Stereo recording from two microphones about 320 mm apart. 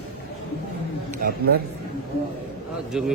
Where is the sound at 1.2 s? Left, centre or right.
Right.